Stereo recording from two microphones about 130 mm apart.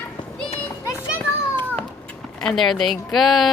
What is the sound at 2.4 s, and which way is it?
A woman's voice, centre (ahead or behind).